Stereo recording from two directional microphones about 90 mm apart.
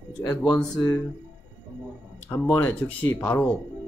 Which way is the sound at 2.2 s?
25° left (ahead or behind).